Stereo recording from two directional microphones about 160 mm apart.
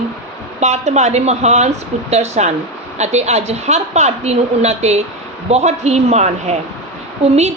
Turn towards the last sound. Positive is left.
turn(degrees=-45)  # may be behind; listen again after turning